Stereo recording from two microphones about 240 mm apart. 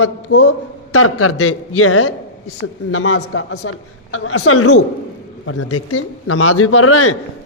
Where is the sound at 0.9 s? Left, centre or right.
Left.